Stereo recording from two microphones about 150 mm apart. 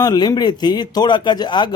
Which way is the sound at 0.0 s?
25° left (ahead or behind).